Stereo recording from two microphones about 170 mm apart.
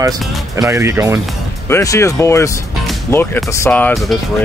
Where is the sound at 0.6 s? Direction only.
15° right (ahead or behind).